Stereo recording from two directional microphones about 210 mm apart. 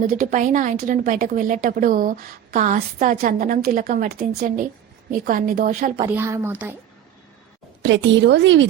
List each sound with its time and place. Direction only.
0.0 s speech: 40° right (ahead or behind)
6.1 s a woman's voice: 10° right (ahead or behind)
7.8 s a woman's voice: 60° right (ahead or behind)